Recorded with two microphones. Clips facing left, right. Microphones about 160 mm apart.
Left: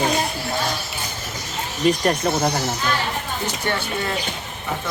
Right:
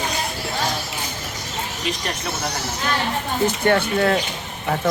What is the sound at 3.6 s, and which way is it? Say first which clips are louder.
Speech: right 8 dB; 50° right (ahead or behind).